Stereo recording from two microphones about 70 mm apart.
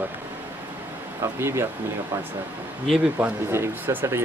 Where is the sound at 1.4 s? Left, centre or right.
Right.